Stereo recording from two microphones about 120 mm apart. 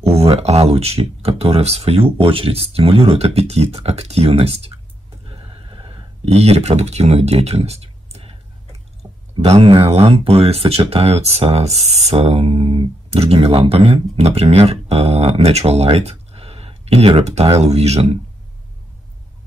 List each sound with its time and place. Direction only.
0.1 s speech: 60° right (ahead or behind)
5.2 s a sound: 50° right (ahead or behind)
9.3 s speech: 55° right (ahead or behind)